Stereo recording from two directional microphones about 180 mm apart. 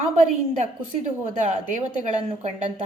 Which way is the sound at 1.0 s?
40° right (ahead or behind).